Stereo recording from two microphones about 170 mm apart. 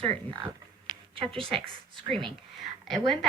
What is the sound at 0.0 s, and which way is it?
A woman's voice, 30° right (ahead or behind).